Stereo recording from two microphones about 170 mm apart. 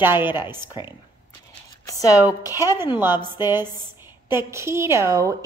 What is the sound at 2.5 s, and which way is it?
A woman's voice, 15° right (ahead or behind).